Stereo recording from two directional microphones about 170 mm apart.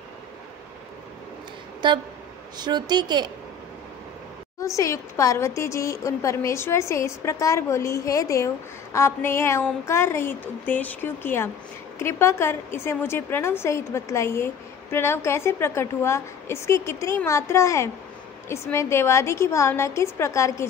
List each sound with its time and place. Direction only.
1.8 s a woman's voice: 25° right (ahead or behind)
4.6 s a woman's voice: 20° left (ahead or behind)